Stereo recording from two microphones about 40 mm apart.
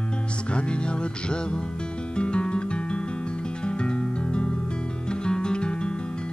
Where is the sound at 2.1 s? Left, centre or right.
Left.